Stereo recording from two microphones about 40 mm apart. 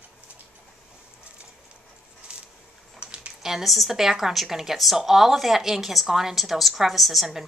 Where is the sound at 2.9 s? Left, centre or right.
Right.